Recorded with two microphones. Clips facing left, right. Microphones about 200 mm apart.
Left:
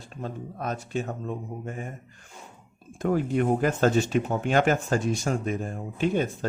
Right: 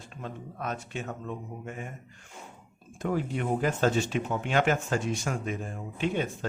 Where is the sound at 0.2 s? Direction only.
40° left (ahead or behind).